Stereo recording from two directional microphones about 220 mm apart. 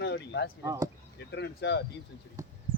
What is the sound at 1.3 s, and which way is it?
Speech, 50° left (ahead or behind).